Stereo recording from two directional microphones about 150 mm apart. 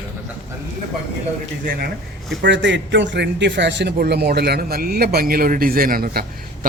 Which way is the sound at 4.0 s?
90° right.